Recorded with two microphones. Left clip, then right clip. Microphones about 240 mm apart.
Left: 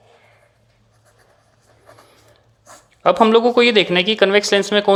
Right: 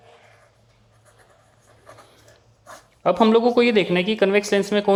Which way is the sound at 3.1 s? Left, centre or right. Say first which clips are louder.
Left 3 dB; left.